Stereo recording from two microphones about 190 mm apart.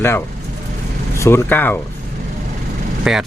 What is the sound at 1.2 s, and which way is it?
Speech, 15° left (ahead or behind).